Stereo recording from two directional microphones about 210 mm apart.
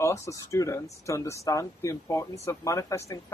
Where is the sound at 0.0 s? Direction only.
15° left (ahead or behind).